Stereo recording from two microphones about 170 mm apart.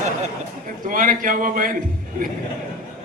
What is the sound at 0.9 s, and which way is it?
Speech, 50° right (ahead or behind).